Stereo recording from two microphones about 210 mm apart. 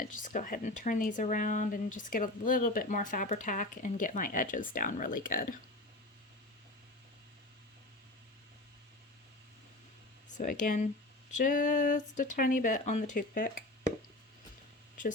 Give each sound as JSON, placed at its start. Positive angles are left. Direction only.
{"t": 0.0, "sound": "speech", "side_deg": 40}
{"t": 10.2, "sound": "speech", "side_deg": 35}